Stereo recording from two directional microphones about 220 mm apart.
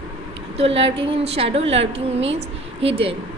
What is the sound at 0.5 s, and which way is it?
A woman's voice, 25° right (ahead or behind).